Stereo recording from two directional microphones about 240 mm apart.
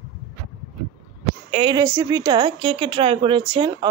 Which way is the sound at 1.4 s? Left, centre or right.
Right.